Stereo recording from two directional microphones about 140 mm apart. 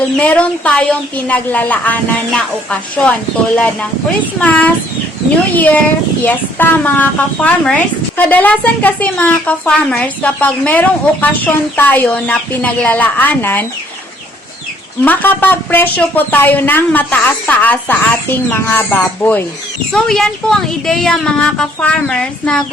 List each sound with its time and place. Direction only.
0.2 s speech: 10° left (ahead or behind)
6.2 s speech: 15° left (ahead or behind)
15.0 s speech: 15° left (ahead or behind)